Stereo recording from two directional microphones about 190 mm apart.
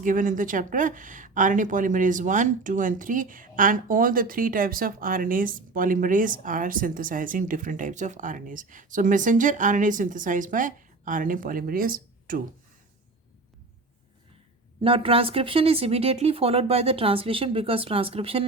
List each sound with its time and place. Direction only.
0.0 s speech: 45° right (ahead or behind)
14.8 s speech: 30° right (ahead or behind)